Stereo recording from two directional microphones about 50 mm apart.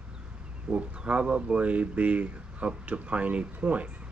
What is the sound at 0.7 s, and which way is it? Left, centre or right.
Speech, right.